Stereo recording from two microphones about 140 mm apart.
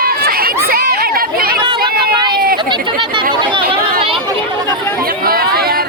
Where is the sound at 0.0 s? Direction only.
90° right.